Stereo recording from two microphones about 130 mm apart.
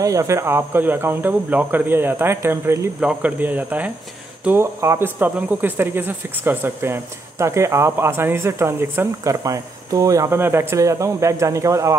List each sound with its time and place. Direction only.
0.0 s speech: 25° right (ahead or behind)